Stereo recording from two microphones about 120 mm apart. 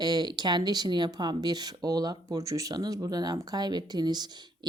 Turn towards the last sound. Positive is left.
turn(degrees=-35)  # may be behind; listen again after turning